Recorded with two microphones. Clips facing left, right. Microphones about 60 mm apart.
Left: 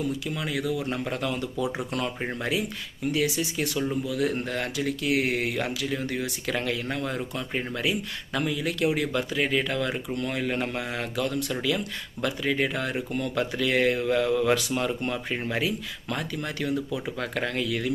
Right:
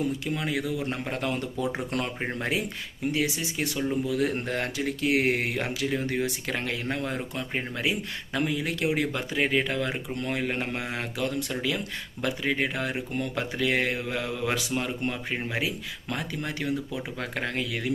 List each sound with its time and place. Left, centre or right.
0.3 s speech: right